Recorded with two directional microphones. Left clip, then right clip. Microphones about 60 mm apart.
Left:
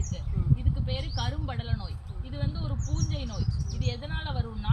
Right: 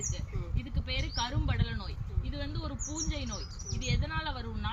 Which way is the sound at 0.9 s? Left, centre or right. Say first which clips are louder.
Right 1 dB; left.